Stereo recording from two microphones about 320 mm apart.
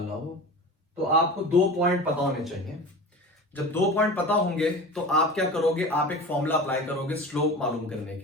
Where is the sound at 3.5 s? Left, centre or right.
Centre.